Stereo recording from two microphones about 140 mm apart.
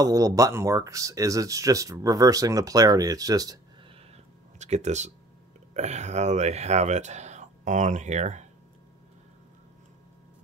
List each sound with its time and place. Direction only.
0.0 s speech: 25° right (ahead or behind)
4.6 s speech: 55° right (ahead or behind)